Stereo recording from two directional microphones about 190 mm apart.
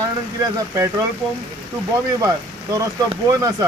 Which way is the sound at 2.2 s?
20° right (ahead or behind).